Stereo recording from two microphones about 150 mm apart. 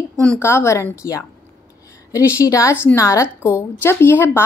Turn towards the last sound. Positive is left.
turn(degrees=15)  # may be behind; listen again after turning